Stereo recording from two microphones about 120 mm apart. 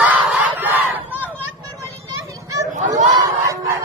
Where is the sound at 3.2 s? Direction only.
25° right (ahead or behind).